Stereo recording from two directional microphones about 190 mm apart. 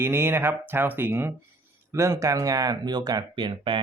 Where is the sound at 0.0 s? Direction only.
15° right (ahead or behind).